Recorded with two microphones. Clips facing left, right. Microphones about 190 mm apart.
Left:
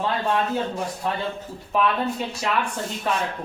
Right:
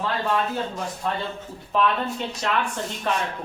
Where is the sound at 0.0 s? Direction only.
20° left (ahead or behind).